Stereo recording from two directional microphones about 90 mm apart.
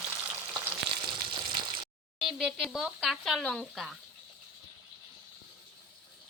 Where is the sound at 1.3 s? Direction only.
60° right (ahead or behind).